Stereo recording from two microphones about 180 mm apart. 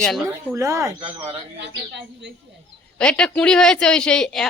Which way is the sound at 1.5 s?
75° right (ahead or behind).